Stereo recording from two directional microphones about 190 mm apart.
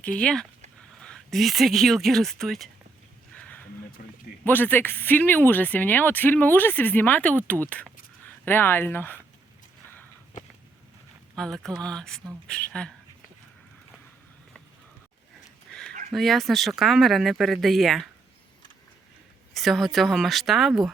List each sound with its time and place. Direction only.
0.0 s speech: 5° left (ahead or behind)
3.3 s a sound: 5° left (ahead or behind)
4.0 s speech: 45° left (ahead or behind)
4.4 s speech: 10° left (ahead or behind)
11.3 s speech: centre (ahead or behind)
16.1 s speech: centre (ahead or behind)
19.5 s speech: centre (ahead or behind)